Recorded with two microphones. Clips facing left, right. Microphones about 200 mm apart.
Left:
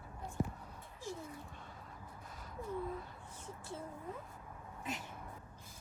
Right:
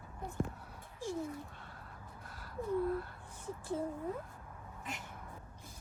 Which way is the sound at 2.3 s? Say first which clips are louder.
Even; centre (ahead or behind).